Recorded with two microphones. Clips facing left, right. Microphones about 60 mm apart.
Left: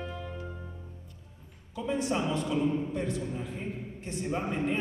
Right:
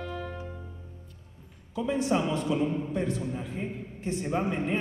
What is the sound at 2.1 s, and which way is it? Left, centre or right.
A man's voice, right.